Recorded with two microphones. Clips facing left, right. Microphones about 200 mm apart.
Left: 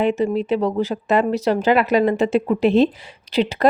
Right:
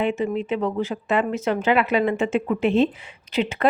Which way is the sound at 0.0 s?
35° left (ahead or behind).